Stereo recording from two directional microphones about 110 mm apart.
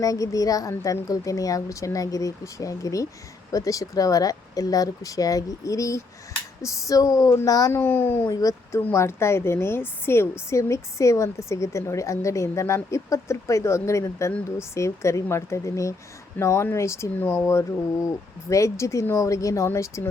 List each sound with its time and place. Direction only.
0.0 s a woman's voice: 30° left (ahead or behind)
7.8 s a woman's voice: 20° left (ahead or behind)
8.3 s a woman's voice: 35° left (ahead or behind)